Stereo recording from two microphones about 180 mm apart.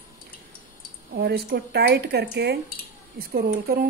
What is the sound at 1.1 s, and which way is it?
Speech, 65° right (ahead or behind).